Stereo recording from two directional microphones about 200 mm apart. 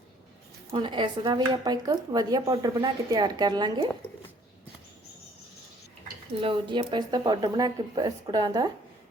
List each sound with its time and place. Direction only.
0.7 s speech: 25° right (ahead or behind)
6.4 s speech: 25° right (ahead or behind)